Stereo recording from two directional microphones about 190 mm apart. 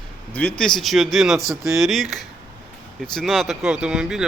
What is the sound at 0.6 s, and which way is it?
Speech, centre (ahead or behind).